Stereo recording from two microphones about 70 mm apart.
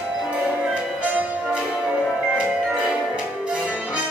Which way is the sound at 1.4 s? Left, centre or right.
Centre.